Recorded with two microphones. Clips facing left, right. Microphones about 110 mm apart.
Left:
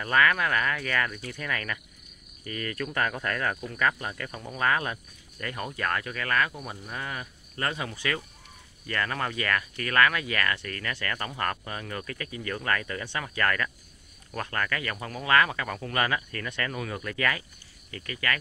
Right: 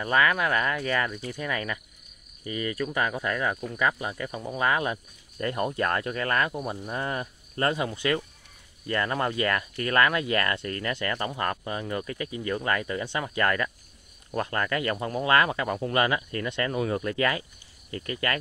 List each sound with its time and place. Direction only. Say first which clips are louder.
0.0 s speech: right 1 dB; 20° right (ahead or behind); by 7.7 s 35° right (ahead or behind)
7.7 s speech: right 5 dB; 20° right (ahead or behind)